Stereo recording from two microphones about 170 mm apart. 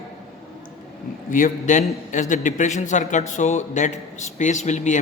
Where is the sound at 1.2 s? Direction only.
50° left (ahead or behind).